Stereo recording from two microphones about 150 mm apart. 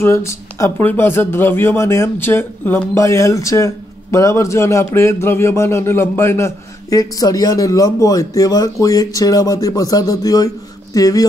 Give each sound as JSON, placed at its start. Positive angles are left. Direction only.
{"t": 0.0, "sound": "speech", "side_deg": 20}